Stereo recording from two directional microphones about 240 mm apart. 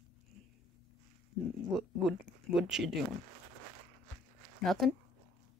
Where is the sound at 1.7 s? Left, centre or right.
Centre.